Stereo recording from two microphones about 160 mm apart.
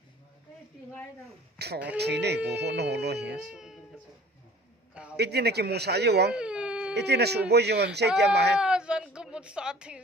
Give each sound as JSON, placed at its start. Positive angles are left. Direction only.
{"t": 1.5, "sound": "a man's voice", "side_deg": -90}
{"t": 3.3, "sound": "speech", "side_deg": -5}
{"t": 5.1, "sound": "a man's voice", "side_deg": -90}
{"t": 6.3, "sound": "a sound", "side_deg": -5}
{"t": 6.9, "sound": "a man's voice", "side_deg": -90}
{"t": 8.5, "sound": "speech", "side_deg": -5}